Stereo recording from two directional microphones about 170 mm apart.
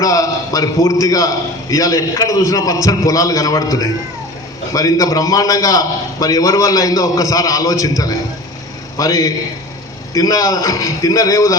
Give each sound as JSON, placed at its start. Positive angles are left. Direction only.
{"t": 0.0, "sound": "a man's voice", "side_deg": 20}